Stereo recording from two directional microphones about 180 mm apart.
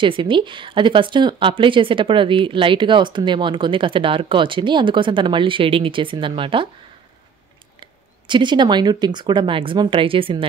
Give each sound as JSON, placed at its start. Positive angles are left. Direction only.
{"t": 0.0, "sound": "speech", "side_deg": -30}
{"t": 7.8, "sound": "speech", "side_deg": -25}